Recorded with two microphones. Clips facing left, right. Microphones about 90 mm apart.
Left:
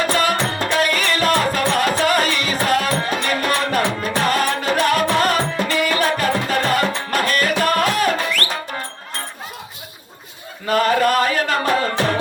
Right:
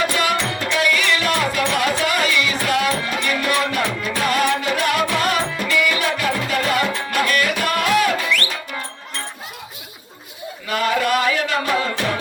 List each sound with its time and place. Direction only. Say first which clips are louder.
0.0 s music: left 2 dB; 40° left (ahead or behind)
10.7 s music: left 3 dB; 40° left (ahead or behind)